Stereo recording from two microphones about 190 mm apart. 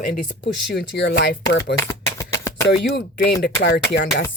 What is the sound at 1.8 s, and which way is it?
Shuffling cards, 15° left (ahead or behind).